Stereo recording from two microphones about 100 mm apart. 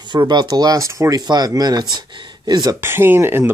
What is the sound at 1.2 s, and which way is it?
Speech, 40° right (ahead or behind).